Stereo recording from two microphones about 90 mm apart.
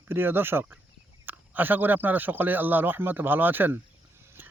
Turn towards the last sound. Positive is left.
turn(degrees=-20)  # may be behind; listen again after turning